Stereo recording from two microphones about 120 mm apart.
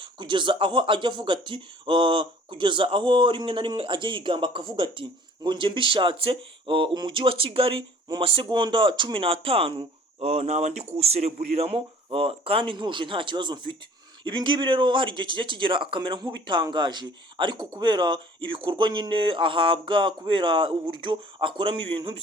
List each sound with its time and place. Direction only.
0.0 s speech: 40° right (ahead or behind)